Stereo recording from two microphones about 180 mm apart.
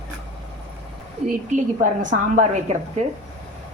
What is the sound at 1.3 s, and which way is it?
Speech, 45° right (ahead or behind).